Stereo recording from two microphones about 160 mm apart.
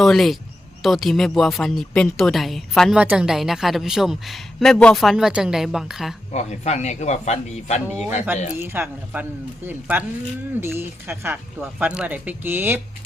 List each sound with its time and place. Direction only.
0.0 s a woman's voice: centre (ahead or behind)
6.3 s speech: 45° left (ahead or behind)
8.3 s speech: 15° right (ahead or behind)